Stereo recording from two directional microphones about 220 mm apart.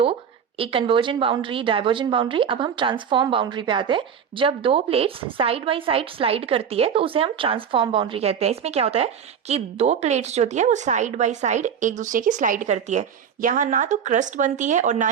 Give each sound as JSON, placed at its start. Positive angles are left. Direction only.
{"t": 0.0, "sound": "a woman's voice", "side_deg": -25}